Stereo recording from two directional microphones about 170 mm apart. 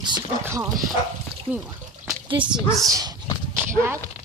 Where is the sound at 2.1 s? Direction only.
30° right (ahead or behind).